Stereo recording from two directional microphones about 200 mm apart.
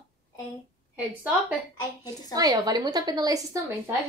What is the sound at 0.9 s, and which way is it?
Speech, 5° right (ahead or behind).